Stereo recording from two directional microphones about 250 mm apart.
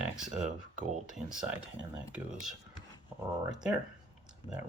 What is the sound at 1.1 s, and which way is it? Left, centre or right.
Speech, centre.